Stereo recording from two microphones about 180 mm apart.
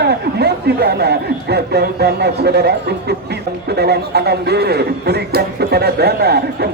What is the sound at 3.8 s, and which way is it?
Music, 65° right (ahead or behind).